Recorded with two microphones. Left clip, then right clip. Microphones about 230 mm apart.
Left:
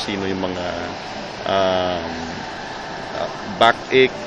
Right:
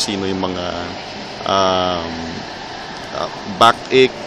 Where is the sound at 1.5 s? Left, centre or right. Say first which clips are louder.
Right 3 dB; right.